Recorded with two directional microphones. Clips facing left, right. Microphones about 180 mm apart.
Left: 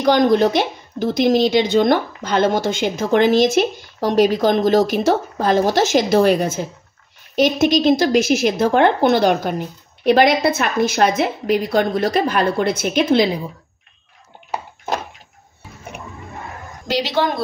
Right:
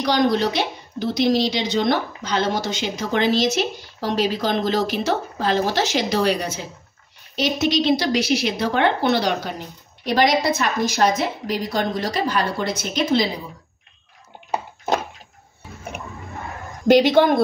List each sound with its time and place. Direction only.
0.0 s speech: 50° left (ahead or behind)
16.8 s a woman's voice: 55° right (ahead or behind)